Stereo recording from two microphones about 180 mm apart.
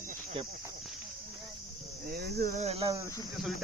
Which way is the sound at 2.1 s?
60° right (ahead or behind).